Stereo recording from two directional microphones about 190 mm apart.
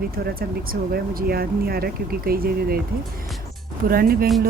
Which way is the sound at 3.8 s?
50° right (ahead or behind).